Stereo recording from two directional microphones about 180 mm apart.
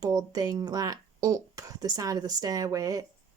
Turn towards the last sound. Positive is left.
turn(degrees=-20)  # may be behind; listen again after turning